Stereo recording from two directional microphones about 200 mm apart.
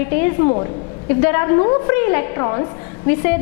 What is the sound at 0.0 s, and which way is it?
A woman's voice, 15° left (ahead or behind).